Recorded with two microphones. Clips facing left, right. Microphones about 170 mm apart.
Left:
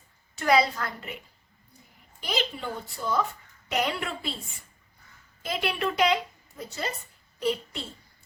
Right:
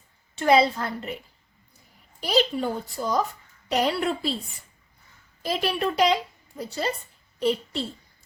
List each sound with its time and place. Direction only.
0.3 s a woman's voice: 25° right (ahead or behind)
2.2 s speech: 35° right (ahead or behind)
5.4 s a woman's voice: 35° right (ahead or behind)